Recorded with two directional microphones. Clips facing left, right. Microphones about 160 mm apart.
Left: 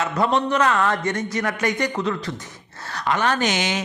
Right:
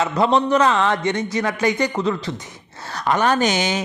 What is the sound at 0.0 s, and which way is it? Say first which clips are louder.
A man's voice: right 3 dB; 30° right (ahead or behind).